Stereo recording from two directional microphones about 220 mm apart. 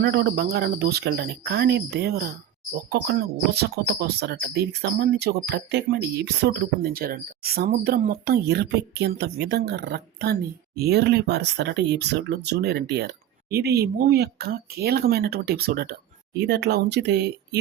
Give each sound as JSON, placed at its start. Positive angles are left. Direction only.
{"t": 0.0, "sound": "speech", "side_deg": -45}